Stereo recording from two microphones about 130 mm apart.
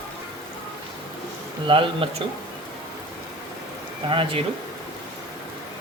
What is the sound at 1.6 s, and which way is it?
Speech, 40° right (ahead or behind).